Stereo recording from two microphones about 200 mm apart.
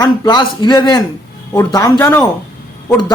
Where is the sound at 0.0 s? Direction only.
20° left (ahead or behind).